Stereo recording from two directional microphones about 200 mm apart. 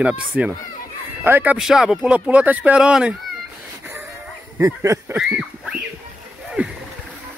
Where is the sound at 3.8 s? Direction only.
10° right (ahead or behind).